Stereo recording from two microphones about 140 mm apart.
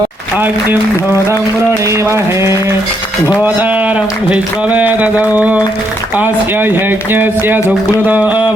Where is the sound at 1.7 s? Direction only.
20° right (ahead or behind).